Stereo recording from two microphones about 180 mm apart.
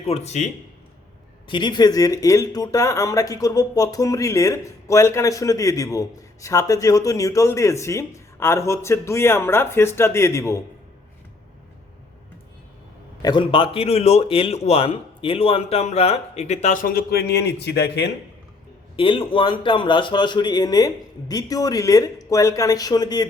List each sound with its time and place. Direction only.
0.0 s a man's voice: 35° left (ahead or behind)
1.5 s speech: 25° left (ahead or behind)
13.2 s a man's voice: 25° left (ahead or behind); by 18.1 s 70° left (ahead or behind)
18.9 s speech: 30° left (ahead or behind)